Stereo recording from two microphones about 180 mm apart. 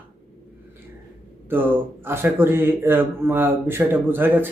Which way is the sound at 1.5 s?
10° right (ahead or behind).